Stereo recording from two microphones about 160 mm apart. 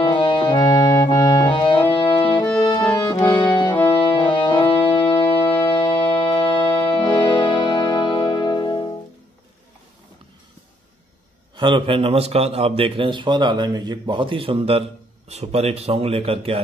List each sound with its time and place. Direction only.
0.0 s organ: 30° left (ahead or behind)
2.0 s music: 35° left (ahead or behind)
11.5 s a man's voice: 30° right (ahead or behind)